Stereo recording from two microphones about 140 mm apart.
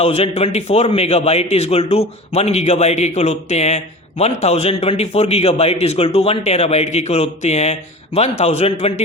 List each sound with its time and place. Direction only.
0.0 s a man's voice: 45° left (ahead or behind)